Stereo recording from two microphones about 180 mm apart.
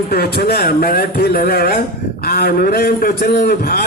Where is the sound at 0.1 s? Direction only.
60° left (ahead or behind).